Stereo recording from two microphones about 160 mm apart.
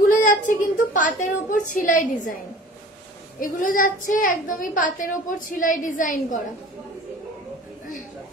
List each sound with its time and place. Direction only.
0.1 s a woman's voice: 55° left (ahead or behind)
3.3 s a woman's voice: 60° left (ahead or behind)